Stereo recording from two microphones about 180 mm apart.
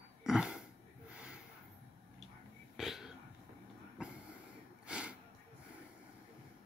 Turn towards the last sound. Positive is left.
turn(degrees=-5)  # may be behind; listen again after turning